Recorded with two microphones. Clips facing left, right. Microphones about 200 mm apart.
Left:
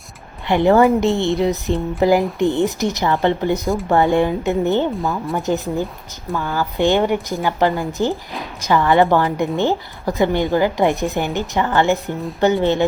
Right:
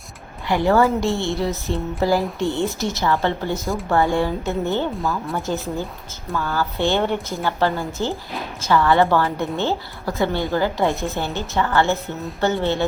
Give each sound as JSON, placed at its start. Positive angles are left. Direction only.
{"t": 0.4, "sound": "a woman's voice", "side_deg": 20}